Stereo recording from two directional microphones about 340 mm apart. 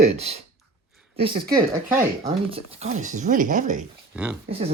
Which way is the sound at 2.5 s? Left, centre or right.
Centre.